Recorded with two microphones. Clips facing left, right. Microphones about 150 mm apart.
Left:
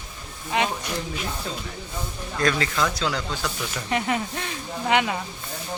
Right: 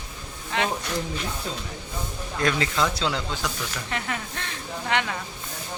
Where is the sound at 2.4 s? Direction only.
20° right (ahead or behind).